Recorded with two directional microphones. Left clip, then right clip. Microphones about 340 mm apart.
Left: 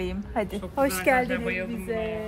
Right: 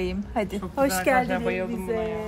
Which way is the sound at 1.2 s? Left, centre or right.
Right.